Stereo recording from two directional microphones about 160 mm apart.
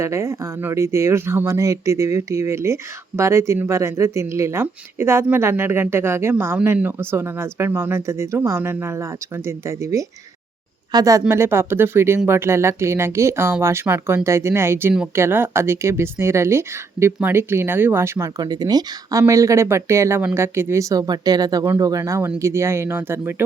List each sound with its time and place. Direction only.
0.0 s speech: 15° right (ahead or behind)